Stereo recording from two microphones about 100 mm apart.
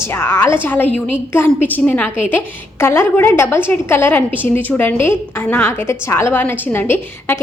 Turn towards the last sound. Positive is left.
turn(degrees=20)  # may be behind; listen again after turning